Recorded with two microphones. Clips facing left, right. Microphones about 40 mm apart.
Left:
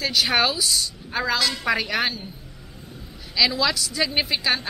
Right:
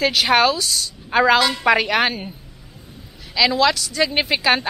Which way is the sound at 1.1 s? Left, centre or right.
Centre.